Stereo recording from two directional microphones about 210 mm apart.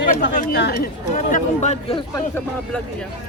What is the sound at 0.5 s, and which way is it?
Speech, 55° left (ahead or behind).